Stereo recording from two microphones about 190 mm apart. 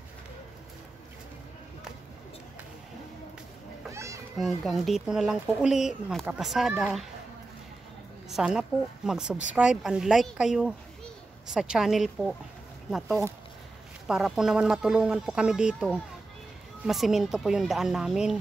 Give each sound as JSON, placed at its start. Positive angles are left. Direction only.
{"t": 3.9, "sound": "children playing", "side_deg": -15}
{"t": 4.4, "sound": "speech", "side_deg": 0}
{"t": 8.3, "sound": "speech", "side_deg": -5}